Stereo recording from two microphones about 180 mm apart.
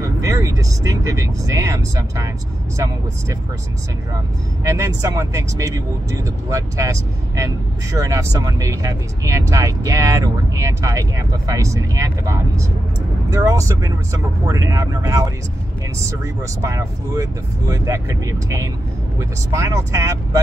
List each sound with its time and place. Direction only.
0.2 s speech: 20° right (ahead or behind)
4.6 s speech: 15° right (ahead or behind)
16.6 s speech: 15° right (ahead or behind)